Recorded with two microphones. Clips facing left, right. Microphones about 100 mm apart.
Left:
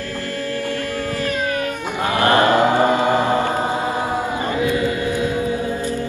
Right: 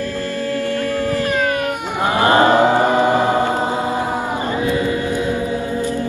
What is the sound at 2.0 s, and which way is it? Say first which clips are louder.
Chant: right 2 dB; 20° right (ahead or behind).